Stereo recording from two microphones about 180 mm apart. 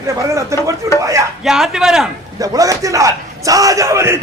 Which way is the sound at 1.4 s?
Centre (ahead or behind).